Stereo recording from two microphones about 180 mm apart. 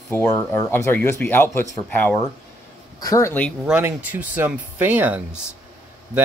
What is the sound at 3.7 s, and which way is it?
Speech, 10° right (ahead or behind).